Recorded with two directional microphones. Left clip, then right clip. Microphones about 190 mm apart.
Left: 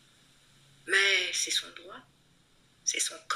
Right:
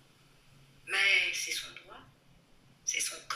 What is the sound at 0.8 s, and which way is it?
Speech, 45° left (ahead or behind).